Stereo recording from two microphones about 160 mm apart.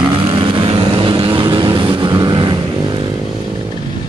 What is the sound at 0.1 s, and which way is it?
Vehicle, 30° right (ahead or behind).